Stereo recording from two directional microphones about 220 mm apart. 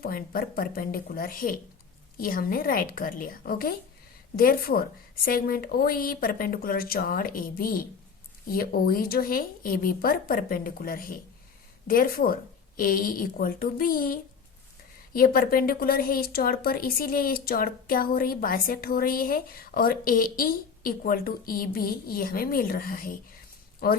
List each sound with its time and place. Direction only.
0.0 s a woman's voice: 40° left (ahead or behind)